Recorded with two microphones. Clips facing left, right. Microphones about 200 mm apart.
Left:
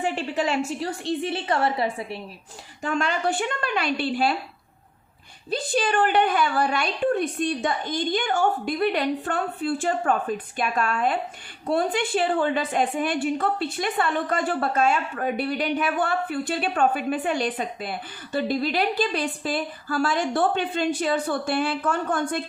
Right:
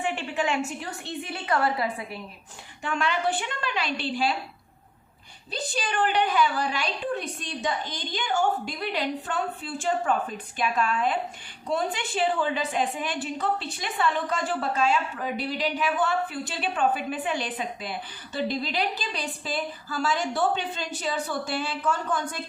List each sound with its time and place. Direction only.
0.0 s a woman's voice: 35° left (ahead or behind)
2.8 s speech: 40° left (ahead or behind)
5.5 s a woman's voice: 55° left (ahead or behind)